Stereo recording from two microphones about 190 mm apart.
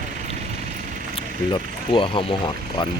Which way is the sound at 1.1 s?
25° left (ahead or behind).